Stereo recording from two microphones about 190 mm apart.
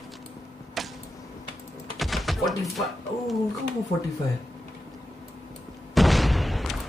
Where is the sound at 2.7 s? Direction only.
Centre (ahead or behind).